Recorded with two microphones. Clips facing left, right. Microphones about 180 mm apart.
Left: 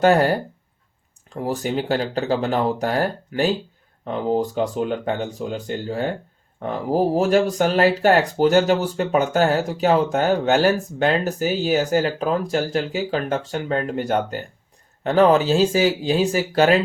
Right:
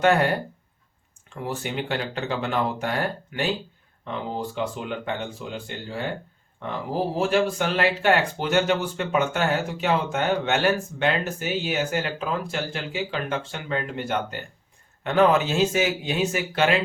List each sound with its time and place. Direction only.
0.0 s speech: 35° left (ahead or behind)